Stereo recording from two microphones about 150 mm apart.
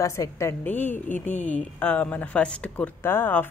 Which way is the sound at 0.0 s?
20° left (ahead or behind).